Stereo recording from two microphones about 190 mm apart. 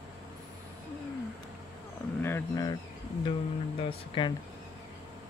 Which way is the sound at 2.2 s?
10° left (ahead or behind).